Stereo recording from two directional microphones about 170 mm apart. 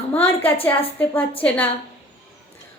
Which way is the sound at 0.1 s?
10° left (ahead or behind).